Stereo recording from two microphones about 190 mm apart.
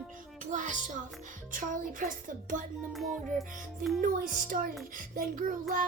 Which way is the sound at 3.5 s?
45° right (ahead or behind).